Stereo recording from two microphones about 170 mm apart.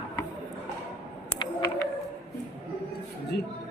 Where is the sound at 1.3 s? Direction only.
20° left (ahead or behind).